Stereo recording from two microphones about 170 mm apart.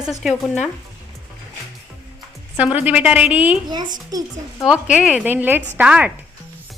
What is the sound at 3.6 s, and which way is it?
Speech, 25° right (ahead or behind).